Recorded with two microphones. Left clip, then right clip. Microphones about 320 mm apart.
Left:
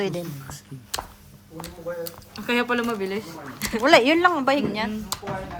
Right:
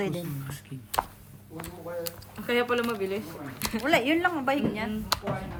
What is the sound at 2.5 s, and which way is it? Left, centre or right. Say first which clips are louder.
Speech: left 3 dB; left.